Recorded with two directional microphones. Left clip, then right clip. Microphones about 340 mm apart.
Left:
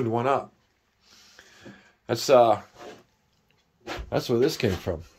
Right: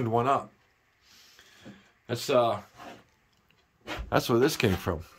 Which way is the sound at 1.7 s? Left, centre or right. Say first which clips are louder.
Left 6 dB; centre.